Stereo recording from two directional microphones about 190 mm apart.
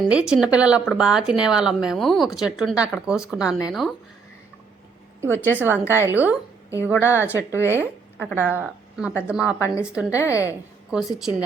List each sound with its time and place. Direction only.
0.0 s a woman's voice: 5° right (ahead or behind)
5.5 s a woman's voice: 10° right (ahead or behind)
5.7 s speech: 10° left (ahead or behind)
6.0 s a woman's voice: 10° right (ahead or behind)
6.9 s speech: 15° left (ahead or behind)
8.5 s a woman's voice: 5° right (ahead or behind)
9.6 s speech: 15° left (ahead or behind)
9.8 s a woman's voice: 5° right (ahead or behind)
10.1 s speech: 15° left (ahead or behind)
10.9 s a woman's voice: 5° right (ahead or behind)